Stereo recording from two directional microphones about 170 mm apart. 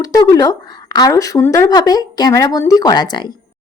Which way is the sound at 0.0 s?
20° left (ahead or behind).